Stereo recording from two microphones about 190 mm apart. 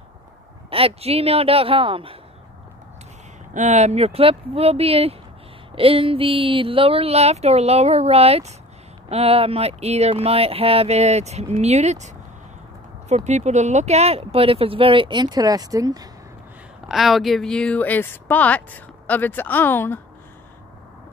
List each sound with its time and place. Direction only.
0.7 s speech: 30° right (ahead or behind)
3.5 s speech: 40° right (ahead or behind)
13.1 s speech: 35° right (ahead or behind); by 16.1 s 20° right (ahead or behind)
16.8 s speech: centre (ahead or behind)